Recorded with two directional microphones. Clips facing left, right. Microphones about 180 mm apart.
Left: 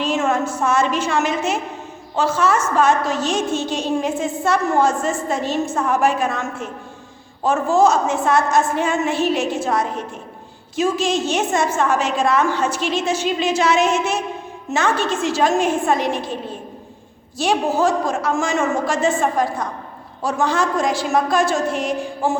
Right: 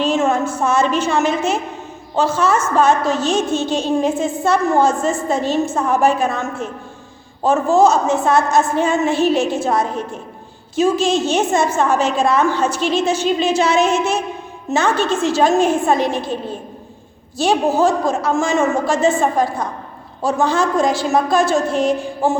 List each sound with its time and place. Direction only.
0.0 s a woman's voice: 30° right (ahead or behind)
17.4 s a woman's voice: 25° right (ahead or behind)